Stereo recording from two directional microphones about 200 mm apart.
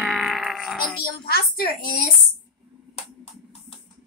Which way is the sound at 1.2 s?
50° left (ahead or behind).